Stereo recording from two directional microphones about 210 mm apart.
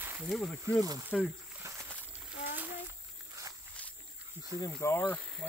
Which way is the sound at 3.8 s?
5° left (ahead or behind).